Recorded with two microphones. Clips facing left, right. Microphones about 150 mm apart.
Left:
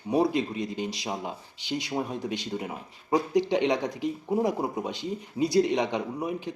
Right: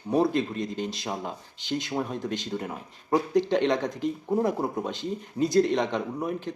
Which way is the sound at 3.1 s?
15° left (ahead or behind).